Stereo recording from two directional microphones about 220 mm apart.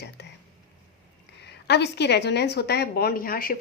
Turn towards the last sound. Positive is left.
turn(degrees=40)  # may be behind; listen again after turning